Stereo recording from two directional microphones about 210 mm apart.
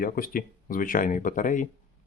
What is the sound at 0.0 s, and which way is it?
Speech, 45° left (ahead or behind).